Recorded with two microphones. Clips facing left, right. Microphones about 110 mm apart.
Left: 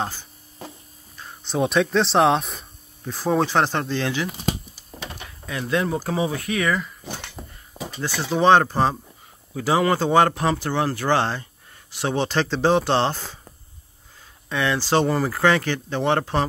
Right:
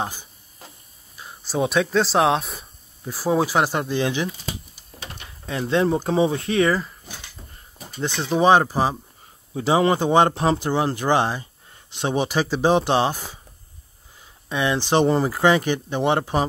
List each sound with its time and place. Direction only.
0.0 s speech: 15° right (ahead or behind)
4.3 s speech: 90° left
5.5 s speech: 25° right (ahead or behind)
7.1 s a sound: 60° left (ahead or behind); by 8.0 s 90° left
8.0 s speech: 20° right (ahead or behind)
9.6 s speech: 25° right (ahead or behind)
14.5 s speech: 20° right (ahead or behind)